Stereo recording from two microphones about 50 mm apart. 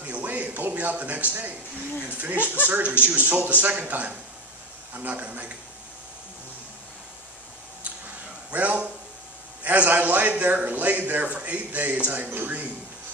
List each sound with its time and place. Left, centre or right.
0.0 s speech: right
2.3 s speech: left
2.6 s a man's voice: right
8.5 s a man's voice: right